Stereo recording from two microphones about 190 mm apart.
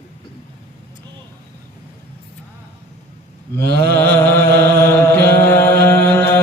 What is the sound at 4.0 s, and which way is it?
Chant, 10° left (ahead or behind).